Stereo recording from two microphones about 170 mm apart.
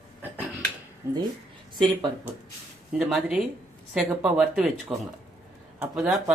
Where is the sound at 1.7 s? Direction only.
25° right (ahead or behind).